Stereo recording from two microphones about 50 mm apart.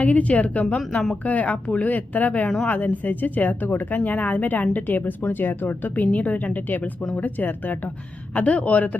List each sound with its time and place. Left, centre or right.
0.0 s speech: left